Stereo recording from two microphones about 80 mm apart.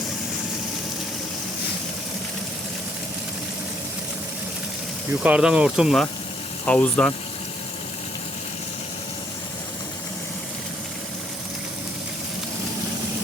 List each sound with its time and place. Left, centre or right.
5.2 s speech: centre
6.7 s speech: centre